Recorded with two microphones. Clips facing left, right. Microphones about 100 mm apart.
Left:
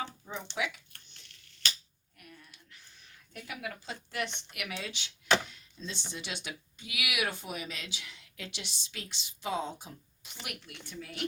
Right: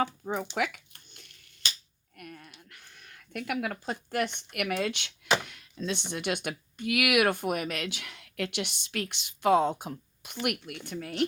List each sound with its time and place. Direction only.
0.0 s speech: 50° right (ahead or behind)
2.1 s a sound: 60° right (ahead or behind)
4.4 s speech: 50° right (ahead or behind)
5.5 s speech: 70° right (ahead or behind)